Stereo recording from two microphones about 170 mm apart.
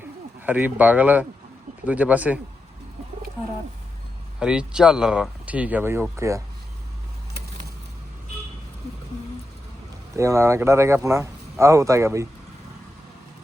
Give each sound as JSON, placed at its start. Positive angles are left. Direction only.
{"t": 0.4, "sound": "speech", "side_deg": -10}
{"t": 4.4, "sound": "speech", "side_deg": -5}
{"t": 10.2, "sound": "speech", "side_deg": -15}